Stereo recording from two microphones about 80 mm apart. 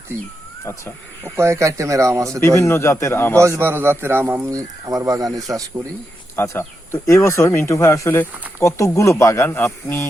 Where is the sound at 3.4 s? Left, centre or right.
Right.